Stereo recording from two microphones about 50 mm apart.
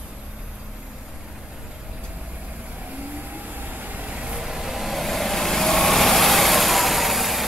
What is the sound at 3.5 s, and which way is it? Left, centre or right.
Vehicle, right.